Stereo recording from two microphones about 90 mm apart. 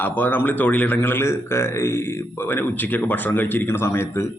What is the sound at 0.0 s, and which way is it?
A man's voice, 20° left (ahead or behind).